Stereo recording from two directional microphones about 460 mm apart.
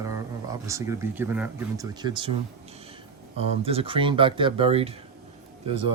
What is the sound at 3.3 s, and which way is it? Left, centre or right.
Speech, centre.